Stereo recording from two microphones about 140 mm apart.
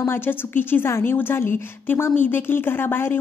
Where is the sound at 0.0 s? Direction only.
15° left (ahead or behind).